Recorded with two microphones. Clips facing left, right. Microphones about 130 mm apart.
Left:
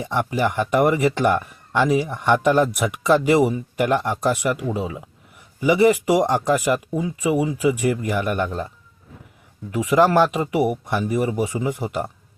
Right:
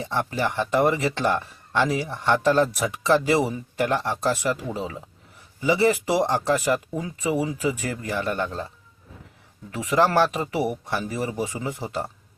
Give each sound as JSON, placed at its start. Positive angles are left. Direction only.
{"t": 0.0, "sound": "speech", "side_deg": 15}
{"t": 9.7, "sound": "speech", "side_deg": 15}